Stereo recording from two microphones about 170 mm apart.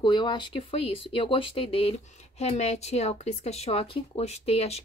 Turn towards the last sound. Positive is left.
turn(degrees=35)  # may be behind; listen again after turning